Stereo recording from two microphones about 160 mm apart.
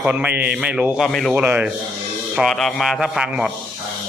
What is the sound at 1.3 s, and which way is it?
Speech, 10° right (ahead or behind).